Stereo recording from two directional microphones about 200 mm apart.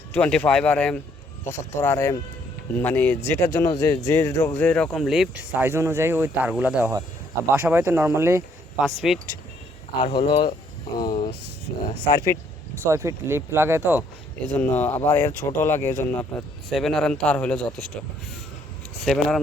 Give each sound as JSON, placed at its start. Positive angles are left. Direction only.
{"t": 0.1, "sound": "a man's voice", "side_deg": 5}
{"t": 8.8, "sound": "a man's voice", "side_deg": 0}
{"t": 10.0, "sound": "speech", "side_deg": 25}
{"t": 12.9, "sound": "speech", "side_deg": -15}
{"t": 14.4, "sound": "a man's voice", "side_deg": 10}
{"t": 19.0, "sound": "a man's voice", "side_deg": 0}